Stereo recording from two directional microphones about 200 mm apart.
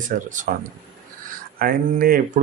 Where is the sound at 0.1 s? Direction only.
40° right (ahead or behind).